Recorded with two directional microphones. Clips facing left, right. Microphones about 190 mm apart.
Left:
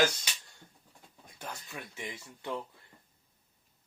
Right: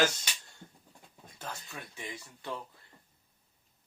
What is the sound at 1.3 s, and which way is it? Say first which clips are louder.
Speech: even; 20° left (ahead or behind).